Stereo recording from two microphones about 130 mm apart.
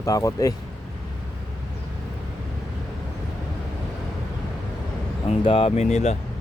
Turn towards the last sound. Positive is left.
turn(degrees=60)  # may be behind; listen again after turning